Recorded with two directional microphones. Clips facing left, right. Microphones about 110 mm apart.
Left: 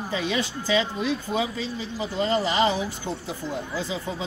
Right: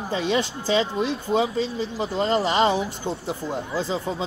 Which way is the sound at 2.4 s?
60° right (ahead or behind).